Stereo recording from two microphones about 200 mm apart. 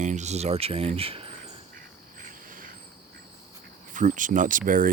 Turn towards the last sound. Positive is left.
turn(degrees=-40)  # may be behind; listen again after turning